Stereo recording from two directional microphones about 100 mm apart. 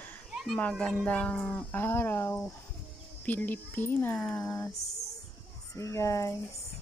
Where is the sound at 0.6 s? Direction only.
15° left (ahead or behind).